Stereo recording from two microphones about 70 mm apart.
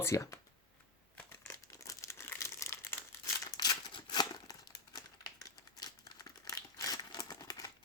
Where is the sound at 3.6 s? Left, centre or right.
Left.